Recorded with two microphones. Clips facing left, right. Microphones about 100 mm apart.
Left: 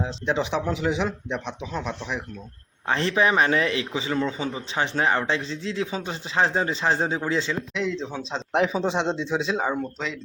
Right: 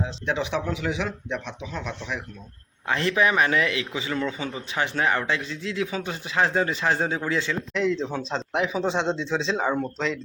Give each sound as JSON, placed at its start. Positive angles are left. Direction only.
{"t": 0.0, "sound": "a man's voice", "side_deg": 30}
{"t": 7.7, "sound": "speech", "side_deg": 0}
{"t": 8.5, "sound": "speech", "side_deg": 35}
{"t": 8.8, "sound": "speech", "side_deg": 15}